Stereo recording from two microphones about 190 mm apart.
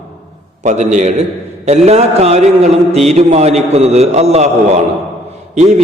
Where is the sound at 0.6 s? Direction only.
40° right (ahead or behind).